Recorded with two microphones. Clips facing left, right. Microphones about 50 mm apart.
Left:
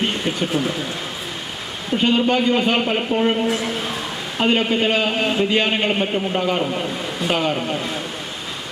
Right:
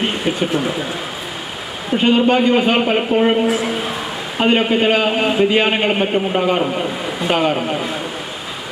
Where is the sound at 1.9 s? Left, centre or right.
Centre.